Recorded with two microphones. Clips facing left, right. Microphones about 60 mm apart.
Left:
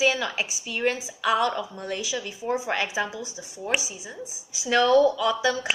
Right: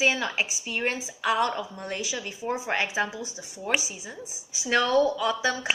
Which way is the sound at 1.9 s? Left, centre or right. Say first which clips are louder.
Left 1 dB; right.